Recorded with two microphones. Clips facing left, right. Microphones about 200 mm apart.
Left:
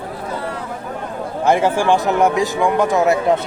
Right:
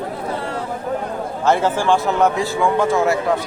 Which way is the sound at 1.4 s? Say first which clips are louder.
Left 2 dB; 15° left (ahead or behind).